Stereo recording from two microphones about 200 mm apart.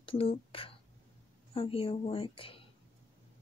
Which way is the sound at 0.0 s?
30° left (ahead or behind).